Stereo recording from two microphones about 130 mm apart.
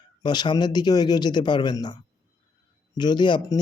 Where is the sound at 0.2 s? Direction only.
35° left (ahead or behind).